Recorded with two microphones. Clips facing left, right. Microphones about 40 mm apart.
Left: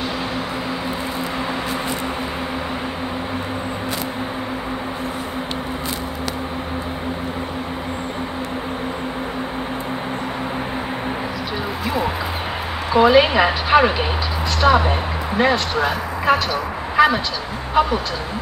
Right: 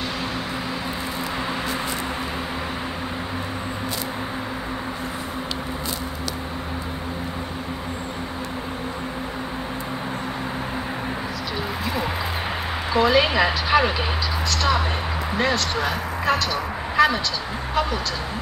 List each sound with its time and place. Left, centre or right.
12.9 s speech: centre